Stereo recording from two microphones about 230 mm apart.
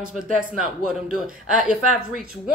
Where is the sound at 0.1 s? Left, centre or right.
Centre.